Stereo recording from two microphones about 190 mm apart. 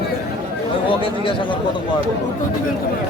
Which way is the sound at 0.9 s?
25° left (ahead or behind).